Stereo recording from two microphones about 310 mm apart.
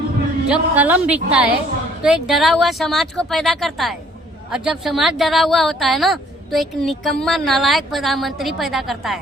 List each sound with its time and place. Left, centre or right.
0.4 s speech: centre